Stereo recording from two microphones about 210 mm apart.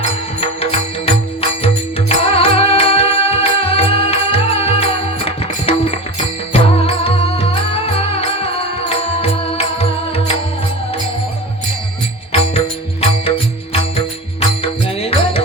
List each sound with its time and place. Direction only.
0.3 s music: 25° left (ahead or behind)
12.3 s music: 25° left (ahead or behind)